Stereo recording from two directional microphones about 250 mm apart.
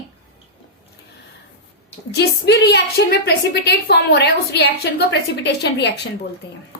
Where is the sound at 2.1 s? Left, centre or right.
Left.